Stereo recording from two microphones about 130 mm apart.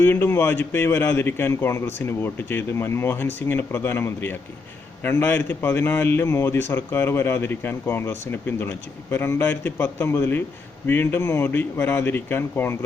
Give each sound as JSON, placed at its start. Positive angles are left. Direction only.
{"t": 0.0, "sound": "a man's voice", "side_deg": 20}